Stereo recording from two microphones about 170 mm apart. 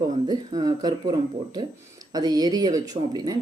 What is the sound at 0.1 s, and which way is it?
Speech, 20° right (ahead or behind).